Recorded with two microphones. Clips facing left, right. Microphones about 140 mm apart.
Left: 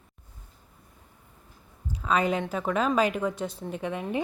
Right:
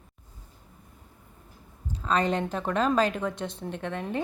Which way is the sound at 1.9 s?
10° left (ahead or behind).